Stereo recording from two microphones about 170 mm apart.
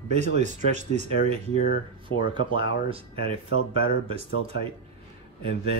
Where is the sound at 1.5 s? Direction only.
55° left (ahead or behind).